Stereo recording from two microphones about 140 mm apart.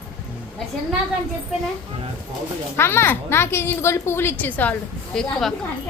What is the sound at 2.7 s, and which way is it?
Speech, 15° left (ahead or behind).